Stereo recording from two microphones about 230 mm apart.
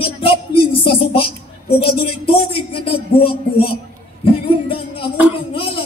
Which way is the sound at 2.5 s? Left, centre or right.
Left.